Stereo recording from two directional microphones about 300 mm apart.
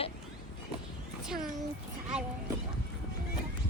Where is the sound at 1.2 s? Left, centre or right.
Centre.